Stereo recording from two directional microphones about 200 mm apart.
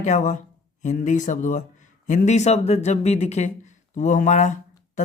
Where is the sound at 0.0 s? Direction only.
40° left (ahead or behind).